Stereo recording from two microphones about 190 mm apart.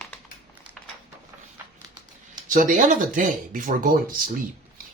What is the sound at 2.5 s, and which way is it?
Speech, 45° right (ahead or behind).